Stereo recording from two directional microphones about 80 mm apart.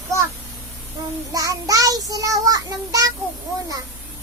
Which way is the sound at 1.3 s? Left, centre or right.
Right.